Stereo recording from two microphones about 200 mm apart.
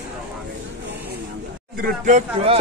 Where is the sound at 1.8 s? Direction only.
35° right (ahead or behind).